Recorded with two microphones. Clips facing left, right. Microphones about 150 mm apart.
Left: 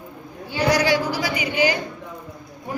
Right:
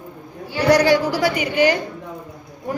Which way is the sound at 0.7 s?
60° right (ahead or behind).